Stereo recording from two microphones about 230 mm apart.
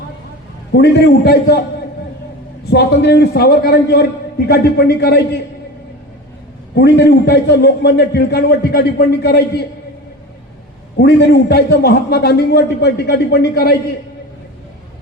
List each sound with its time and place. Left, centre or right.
0.7 s a man's voice: left
2.6 s a man's voice: left
6.7 s a man's voice: left
11.0 s a man's voice: left